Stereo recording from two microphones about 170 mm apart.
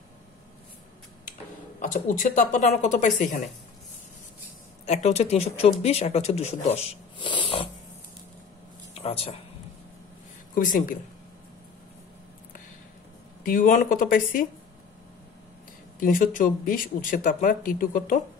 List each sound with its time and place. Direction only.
1.8 s speech: 50° left (ahead or behind)
4.8 s speech: 40° left (ahead or behind)
8.9 s speech: 35° left (ahead or behind)
10.5 s speech: 55° left (ahead or behind)
13.4 s speech: 50° left (ahead or behind)
16.0 s speech: 55° left (ahead or behind)